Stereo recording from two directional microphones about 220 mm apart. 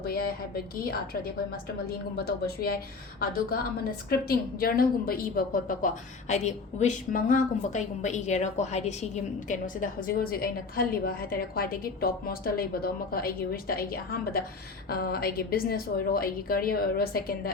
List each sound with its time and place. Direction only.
0.0 s a woman's voice: 45° left (ahead or behind)